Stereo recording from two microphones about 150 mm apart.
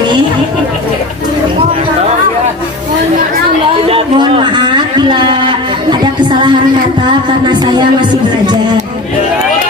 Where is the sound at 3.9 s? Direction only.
35° right (ahead or behind).